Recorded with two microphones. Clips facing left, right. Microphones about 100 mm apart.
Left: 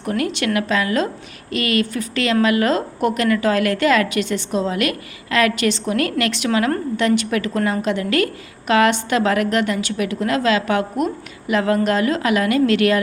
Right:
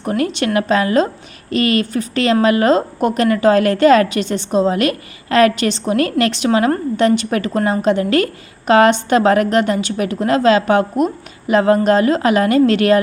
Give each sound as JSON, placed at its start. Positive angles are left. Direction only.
{"t": 0.0, "sound": "a woman's voice", "side_deg": -30}